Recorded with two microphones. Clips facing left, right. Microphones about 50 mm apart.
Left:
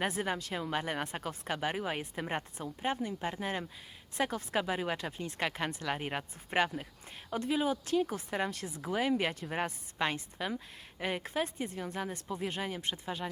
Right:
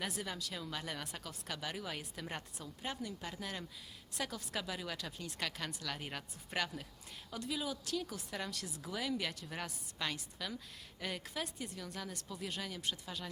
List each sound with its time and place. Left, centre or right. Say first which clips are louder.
0.0 s speech: left 8 dB; left